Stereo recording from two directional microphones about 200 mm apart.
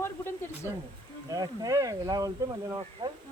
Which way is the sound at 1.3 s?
20° right (ahead or behind).